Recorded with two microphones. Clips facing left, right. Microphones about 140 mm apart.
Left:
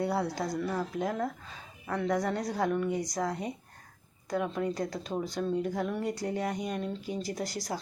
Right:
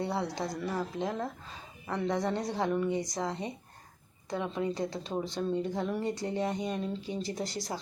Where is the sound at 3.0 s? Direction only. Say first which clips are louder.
Left 2 dB; 25° right (ahead or behind).